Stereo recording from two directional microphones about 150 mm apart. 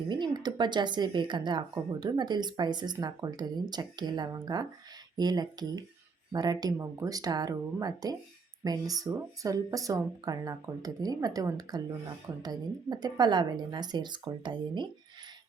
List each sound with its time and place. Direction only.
0.1 s speech: 30° right (ahead or behind)